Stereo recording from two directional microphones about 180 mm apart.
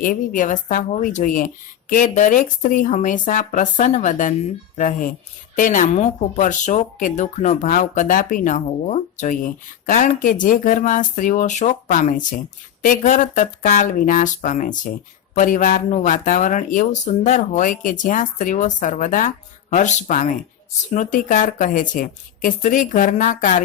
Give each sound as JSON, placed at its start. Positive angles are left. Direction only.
{"t": 0.0, "sound": "speech", "side_deg": 50}